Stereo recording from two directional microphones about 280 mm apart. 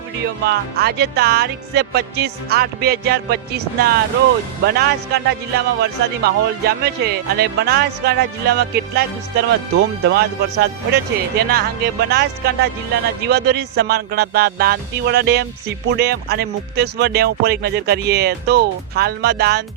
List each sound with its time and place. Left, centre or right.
0.4 s a man's voice: right